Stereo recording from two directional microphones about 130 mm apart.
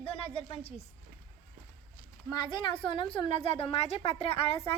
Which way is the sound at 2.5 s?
40° left (ahead or behind).